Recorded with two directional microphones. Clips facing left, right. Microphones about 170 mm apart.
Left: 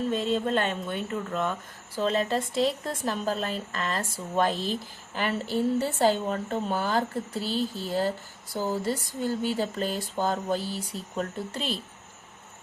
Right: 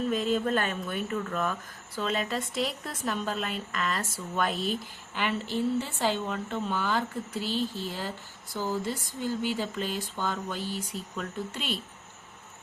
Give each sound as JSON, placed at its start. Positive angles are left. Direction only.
{"t": 0.1, "sound": "speech", "side_deg": 25}